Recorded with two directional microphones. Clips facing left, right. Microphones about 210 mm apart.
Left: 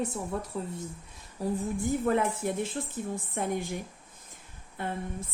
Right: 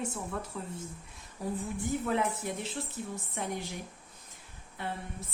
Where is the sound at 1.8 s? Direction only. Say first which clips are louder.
Left 4 dB; 50° left (ahead or behind).